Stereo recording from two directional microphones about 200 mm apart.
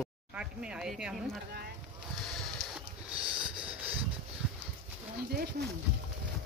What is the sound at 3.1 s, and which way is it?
Sniff, 25° right (ahead or behind).